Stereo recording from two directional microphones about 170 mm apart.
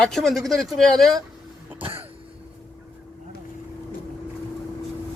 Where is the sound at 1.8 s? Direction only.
30° right (ahead or behind).